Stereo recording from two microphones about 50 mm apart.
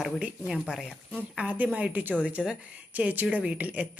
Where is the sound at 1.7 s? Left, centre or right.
Right.